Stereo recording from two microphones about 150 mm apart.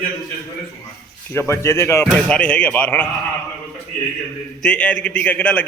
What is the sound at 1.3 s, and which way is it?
A man's voice, 15° left (ahead or behind).